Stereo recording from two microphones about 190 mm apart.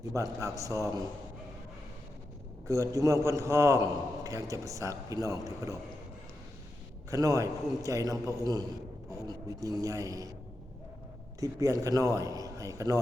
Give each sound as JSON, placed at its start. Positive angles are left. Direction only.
{"t": 0.1, "sound": "a man's voice", "side_deg": -15}
{"t": 2.6, "sound": "a man's voice", "side_deg": -15}
{"t": 7.1, "sound": "a man's voice", "side_deg": -15}
{"t": 9.2, "sound": "a man's voice", "side_deg": -15}
{"t": 11.3, "sound": "a man's voice", "side_deg": -15}